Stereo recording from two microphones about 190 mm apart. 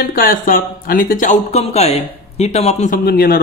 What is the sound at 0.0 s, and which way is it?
Speech, 50° left (ahead or behind).